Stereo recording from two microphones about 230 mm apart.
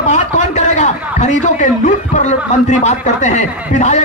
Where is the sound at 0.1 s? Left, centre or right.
Left.